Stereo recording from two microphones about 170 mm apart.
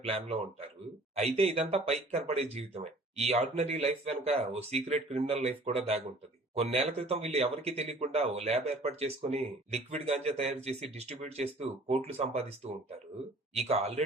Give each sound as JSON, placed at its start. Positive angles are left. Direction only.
{"t": 0.0, "sound": "speech", "side_deg": -35}
{"t": 13.7, "sound": "speech", "side_deg": -40}